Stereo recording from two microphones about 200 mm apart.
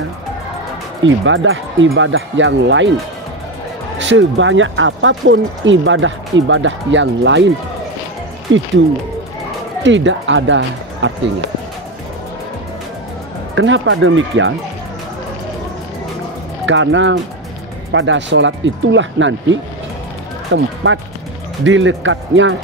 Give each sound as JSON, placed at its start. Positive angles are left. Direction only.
{"t": 1.0, "sound": "speech", "side_deg": -70}
{"t": 4.0, "sound": "speech", "side_deg": -65}
{"t": 9.8, "sound": "speech", "side_deg": -65}
{"t": 13.6, "sound": "speech", "side_deg": -70}
{"t": 16.6, "sound": "speech", "side_deg": -70}